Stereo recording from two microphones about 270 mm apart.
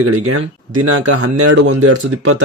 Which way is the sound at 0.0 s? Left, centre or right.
Right.